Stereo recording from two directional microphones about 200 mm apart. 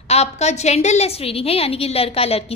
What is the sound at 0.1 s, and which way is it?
A woman's voice, 35° left (ahead or behind).